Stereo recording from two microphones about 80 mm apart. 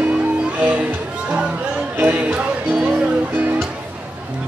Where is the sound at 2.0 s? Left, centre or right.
Centre.